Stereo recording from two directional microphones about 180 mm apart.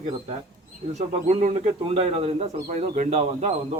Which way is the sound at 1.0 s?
40° right (ahead or behind).